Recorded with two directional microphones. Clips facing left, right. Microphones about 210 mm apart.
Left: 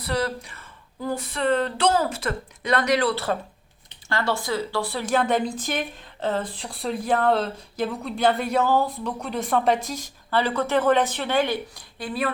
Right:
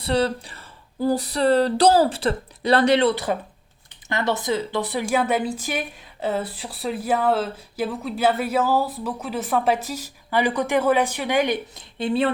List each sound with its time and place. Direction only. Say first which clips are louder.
0.0 s speech: right 4 dB; 30° right (ahead or behind)